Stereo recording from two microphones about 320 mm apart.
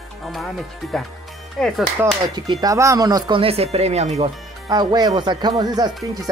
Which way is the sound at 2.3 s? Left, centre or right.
Centre.